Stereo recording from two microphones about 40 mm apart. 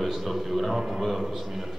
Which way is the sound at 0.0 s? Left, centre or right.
Centre.